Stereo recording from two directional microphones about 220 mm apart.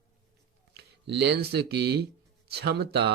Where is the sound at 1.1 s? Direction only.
50° right (ahead or behind).